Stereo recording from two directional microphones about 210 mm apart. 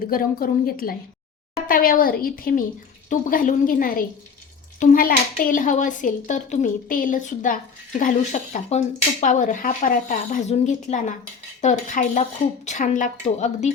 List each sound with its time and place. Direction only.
0.1 s a child's voice: 45° left (ahead or behind)